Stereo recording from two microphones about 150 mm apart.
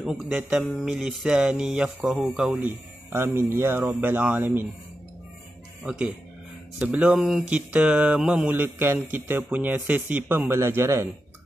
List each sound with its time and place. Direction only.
0.0 s mantra: 5° right (ahead or behind)
2.5 s speech: 15° right (ahead or behind)
5.9 s mantra: 5° right (ahead or behind)
6.8 s speech: 5° right (ahead or behind)